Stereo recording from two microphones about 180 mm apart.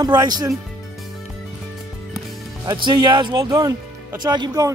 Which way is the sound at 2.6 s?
20° right (ahead or behind).